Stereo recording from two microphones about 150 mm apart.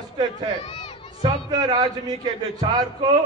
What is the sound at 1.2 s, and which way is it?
A man's voice, 25° right (ahead or behind).